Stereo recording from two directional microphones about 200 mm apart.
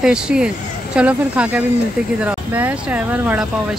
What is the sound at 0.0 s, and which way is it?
Speech, 5° right (ahead or behind).